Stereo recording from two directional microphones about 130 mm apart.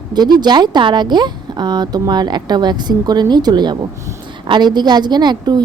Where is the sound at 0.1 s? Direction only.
35° right (ahead or behind).